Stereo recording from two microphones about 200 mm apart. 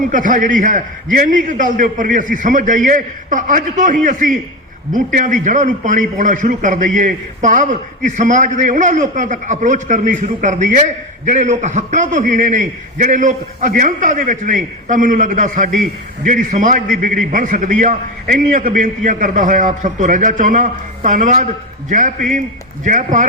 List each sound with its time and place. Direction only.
0.1 s a man's voice: 40° right (ahead or behind)